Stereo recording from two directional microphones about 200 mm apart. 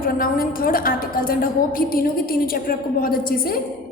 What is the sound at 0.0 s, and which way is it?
A woman's voice, 45° left (ahead or behind).